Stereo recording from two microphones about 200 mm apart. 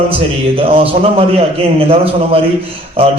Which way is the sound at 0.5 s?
30° right (ahead or behind).